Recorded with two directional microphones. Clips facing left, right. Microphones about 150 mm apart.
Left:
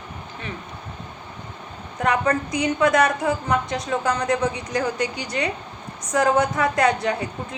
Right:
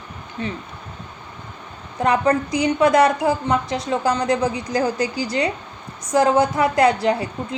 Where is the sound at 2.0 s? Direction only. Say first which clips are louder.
Right 3 dB; 25° right (ahead or behind).